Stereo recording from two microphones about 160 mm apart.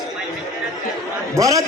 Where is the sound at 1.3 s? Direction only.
20° right (ahead or behind).